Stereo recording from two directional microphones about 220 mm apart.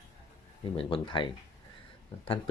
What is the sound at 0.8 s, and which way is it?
Speech, 25° left (ahead or behind).